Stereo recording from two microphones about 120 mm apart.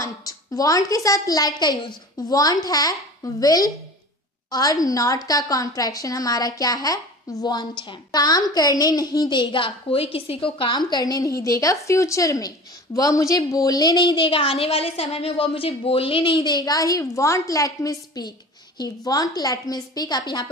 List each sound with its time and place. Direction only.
0.0 s a woman's voice: 30° left (ahead or behind)